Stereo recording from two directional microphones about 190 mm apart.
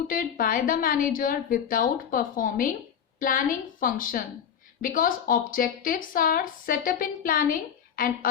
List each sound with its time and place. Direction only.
0.1 s speech: 50° left (ahead or behind)